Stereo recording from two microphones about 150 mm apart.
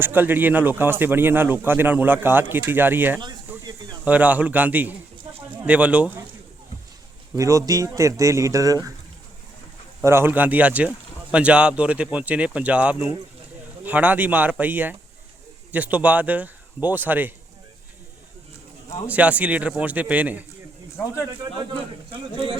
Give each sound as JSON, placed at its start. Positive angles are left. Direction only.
{"t": 0.0, "sound": "speech", "side_deg": -15}
{"t": 7.3, "sound": "speech", "side_deg": -20}
{"t": 10.0, "sound": "speech", "side_deg": -15}
{"t": 19.0, "sound": "speech", "side_deg": -10}
{"t": 21.2, "sound": "speech", "side_deg": -30}